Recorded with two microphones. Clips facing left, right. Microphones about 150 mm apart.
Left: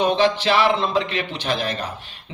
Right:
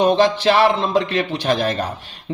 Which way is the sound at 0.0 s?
40° right (ahead or behind).